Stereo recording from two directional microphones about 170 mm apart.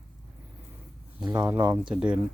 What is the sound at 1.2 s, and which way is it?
Speech, 25° right (ahead or behind).